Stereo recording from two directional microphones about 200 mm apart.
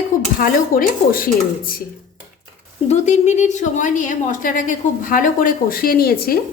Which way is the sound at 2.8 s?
35° left (ahead or behind).